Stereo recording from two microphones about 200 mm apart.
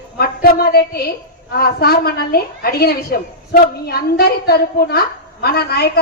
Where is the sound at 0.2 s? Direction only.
50° left (ahead or behind).